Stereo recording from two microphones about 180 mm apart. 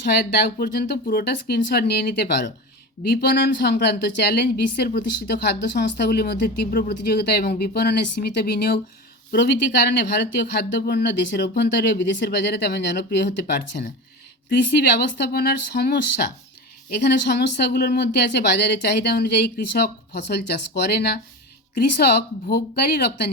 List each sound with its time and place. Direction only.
0.6 s a woman's voice: 55° left (ahead or behind)
10.2 s a woman's voice: 65° left (ahead or behind)
16.9 s speech: 65° left (ahead or behind)